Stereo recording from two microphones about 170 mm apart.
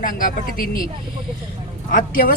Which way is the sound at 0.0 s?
55° left (ahead or behind).